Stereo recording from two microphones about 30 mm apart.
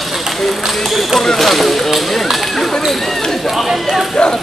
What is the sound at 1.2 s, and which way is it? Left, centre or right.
Basketball bounce, centre.